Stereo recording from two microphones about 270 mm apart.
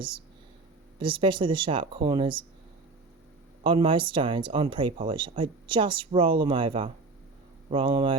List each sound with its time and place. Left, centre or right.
0.9 s speech: centre
3.6 s speech: centre